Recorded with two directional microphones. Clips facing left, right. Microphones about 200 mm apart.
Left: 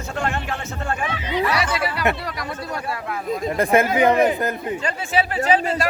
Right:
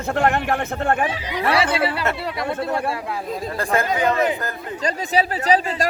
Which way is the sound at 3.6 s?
20° left (ahead or behind).